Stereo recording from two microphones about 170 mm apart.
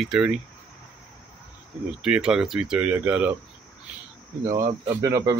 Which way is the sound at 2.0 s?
5° right (ahead or behind).